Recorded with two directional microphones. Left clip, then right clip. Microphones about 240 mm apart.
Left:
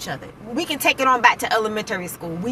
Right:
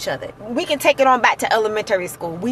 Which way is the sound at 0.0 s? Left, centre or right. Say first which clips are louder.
Right 6 dB; centre.